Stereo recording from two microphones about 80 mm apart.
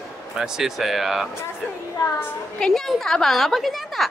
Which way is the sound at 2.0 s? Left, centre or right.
Left.